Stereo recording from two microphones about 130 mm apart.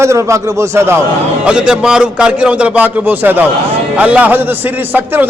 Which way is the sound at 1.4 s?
5° right (ahead or behind).